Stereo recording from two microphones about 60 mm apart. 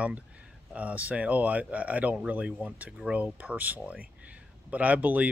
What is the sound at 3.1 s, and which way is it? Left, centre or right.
Speech, right.